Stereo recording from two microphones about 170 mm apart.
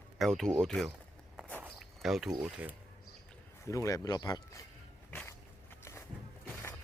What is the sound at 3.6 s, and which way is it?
Speech, 20° left (ahead or behind).